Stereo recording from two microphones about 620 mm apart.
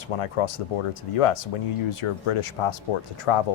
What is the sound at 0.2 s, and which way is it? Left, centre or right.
Speech, left.